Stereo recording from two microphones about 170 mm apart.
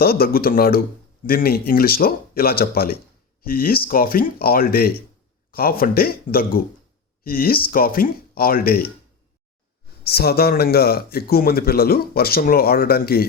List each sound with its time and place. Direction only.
0.0 s speech: 60° left (ahead or behind)
10.0 s speech: 65° left (ahead or behind)